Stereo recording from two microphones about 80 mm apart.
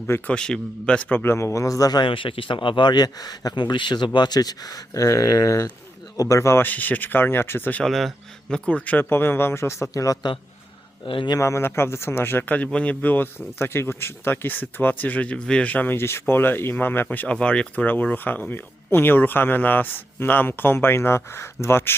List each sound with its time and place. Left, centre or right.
0.3 s speech: centre; by 2.0 s left
2.0 s speech: left
6.7 s speech: left
7.9 s speech: centre; by 10.2 s left
11.0 s speech: left
11.3 s speech: left